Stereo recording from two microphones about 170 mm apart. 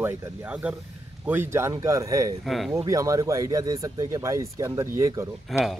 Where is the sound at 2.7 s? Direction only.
20° right (ahead or behind).